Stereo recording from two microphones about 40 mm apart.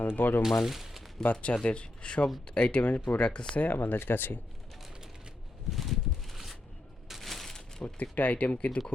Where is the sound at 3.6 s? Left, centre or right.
Left.